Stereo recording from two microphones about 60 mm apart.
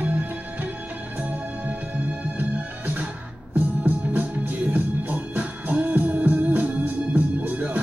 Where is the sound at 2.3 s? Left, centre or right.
Right.